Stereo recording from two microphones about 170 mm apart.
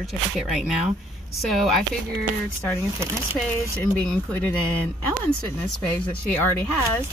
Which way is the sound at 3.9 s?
5° left (ahead or behind).